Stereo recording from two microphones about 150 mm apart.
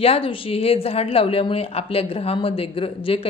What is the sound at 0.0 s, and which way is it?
Speech, 40° left (ahead or behind).